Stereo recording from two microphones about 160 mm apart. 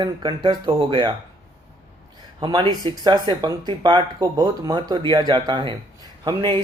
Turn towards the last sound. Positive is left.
turn(degrees=-30)  # may be behind; listen again after turning